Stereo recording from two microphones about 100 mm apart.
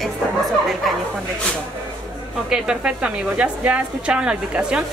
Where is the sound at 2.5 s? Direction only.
10° right (ahead or behind).